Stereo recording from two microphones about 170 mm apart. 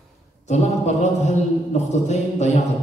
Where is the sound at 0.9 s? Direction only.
40° left (ahead or behind).